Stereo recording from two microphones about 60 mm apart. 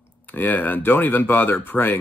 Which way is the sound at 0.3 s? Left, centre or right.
Left.